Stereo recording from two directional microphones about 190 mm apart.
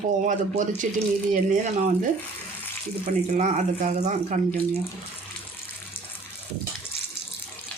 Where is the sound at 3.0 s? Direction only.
35° right (ahead or behind).